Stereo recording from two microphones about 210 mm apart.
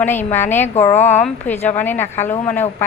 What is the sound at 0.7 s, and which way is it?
Speech, 30° left (ahead or behind).